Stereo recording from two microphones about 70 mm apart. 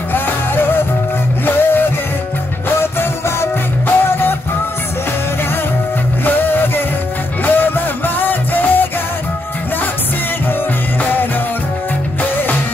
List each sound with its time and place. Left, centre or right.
0.1 s music: left
6.2 s music: left
12.2 s music: left